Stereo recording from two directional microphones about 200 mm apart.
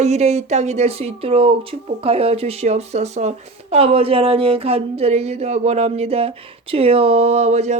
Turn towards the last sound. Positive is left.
turn(degrees=-35)  # may be behind; listen again after turning